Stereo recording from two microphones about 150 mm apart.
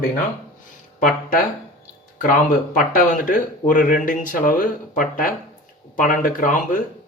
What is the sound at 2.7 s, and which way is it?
Speech, 60° left (ahead or behind).